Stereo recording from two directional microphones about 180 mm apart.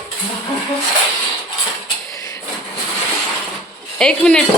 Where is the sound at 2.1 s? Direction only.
20° left (ahead or behind).